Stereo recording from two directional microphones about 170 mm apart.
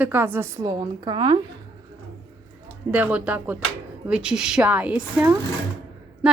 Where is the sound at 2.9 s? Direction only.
10° right (ahead or behind).